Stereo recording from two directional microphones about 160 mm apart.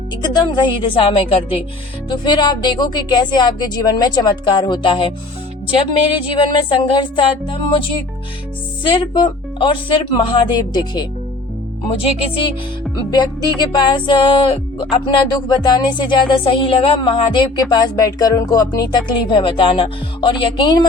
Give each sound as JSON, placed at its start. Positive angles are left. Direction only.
{"t": 0.2, "sound": "speech", "side_deg": 25}